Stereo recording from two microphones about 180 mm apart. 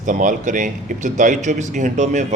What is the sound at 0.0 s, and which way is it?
Speech, 45° right (ahead or behind).